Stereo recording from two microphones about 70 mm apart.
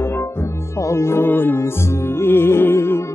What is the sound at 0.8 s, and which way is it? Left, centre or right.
Music, left.